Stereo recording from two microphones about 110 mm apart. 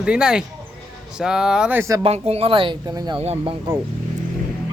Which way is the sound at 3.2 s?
75° right (ahead or behind).